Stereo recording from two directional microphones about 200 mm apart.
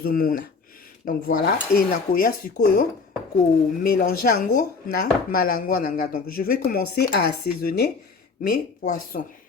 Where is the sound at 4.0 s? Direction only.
50° left (ahead or behind).